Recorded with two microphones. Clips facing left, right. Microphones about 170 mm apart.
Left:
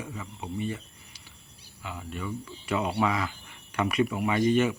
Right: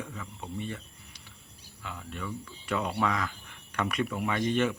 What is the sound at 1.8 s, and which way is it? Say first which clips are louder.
Speech: left 3 dB; 10° left (ahead or behind).